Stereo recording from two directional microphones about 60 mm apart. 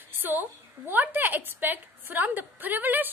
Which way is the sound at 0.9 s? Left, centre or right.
Right.